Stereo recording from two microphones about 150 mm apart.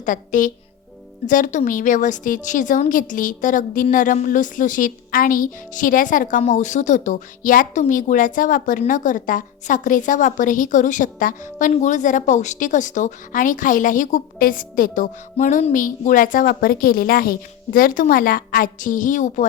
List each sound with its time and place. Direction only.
0.0 s a woman's voice: 60° left (ahead or behind)